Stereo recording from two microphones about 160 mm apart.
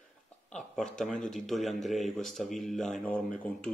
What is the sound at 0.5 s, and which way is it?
Mantra, 5° left (ahead or behind).